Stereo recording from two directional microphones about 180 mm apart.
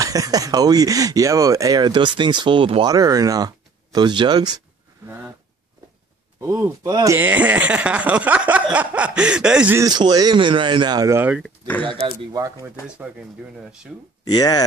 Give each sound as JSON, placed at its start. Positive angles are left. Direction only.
{"t": 0.0, "sound": "speech", "side_deg": -20}
{"t": 5.0, "sound": "speech", "side_deg": -10}
{"t": 6.4, "sound": "speech", "side_deg": -15}
{"t": 9.8, "sound": "speech", "side_deg": -20}
{"t": 11.4, "sound": "speech", "side_deg": 10}
{"t": 11.9, "sound": "speech", "side_deg": -25}
{"t": 12.8, "sound": "speech", "side_deg": -5}
{"t": 14.2, "sound": "speech", "side_deg": 20}